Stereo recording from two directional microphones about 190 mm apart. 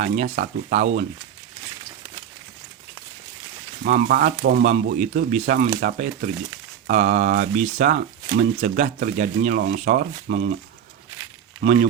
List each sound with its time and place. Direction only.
0.0 s speech: 40° right (ahead or behind)
3.8 s speech: 45° right (ahead or behind)
11.6 s speech: 35° right (ahead or behind)